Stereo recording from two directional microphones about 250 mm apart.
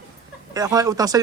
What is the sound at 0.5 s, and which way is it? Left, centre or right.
Speech, centre.